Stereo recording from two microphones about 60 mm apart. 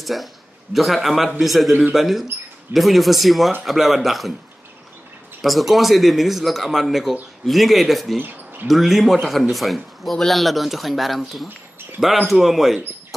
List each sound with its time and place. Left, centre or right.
0.0 s a man's voice: centre
5.4 s speech: centre
8.2 s a sound: right
8.6 s speech: centre